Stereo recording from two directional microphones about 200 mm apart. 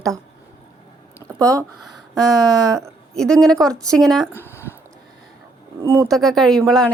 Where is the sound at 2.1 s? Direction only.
Centre (ahead or behind).